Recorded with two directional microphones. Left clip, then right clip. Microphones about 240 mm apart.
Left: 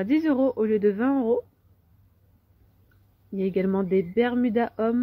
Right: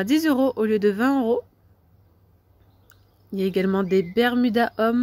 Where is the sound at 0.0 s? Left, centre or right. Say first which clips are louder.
Right 2 dB; right.